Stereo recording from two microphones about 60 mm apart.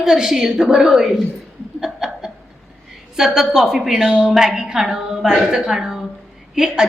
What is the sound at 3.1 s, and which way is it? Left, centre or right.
A woman's voice, centre.